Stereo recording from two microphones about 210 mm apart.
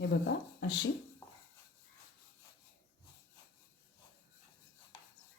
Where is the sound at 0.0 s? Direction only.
55° left (ahead or behind).